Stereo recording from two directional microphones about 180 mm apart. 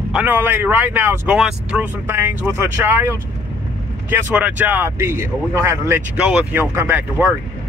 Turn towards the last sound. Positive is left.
turn(degrees=-10)  # may be behind; listen again after turning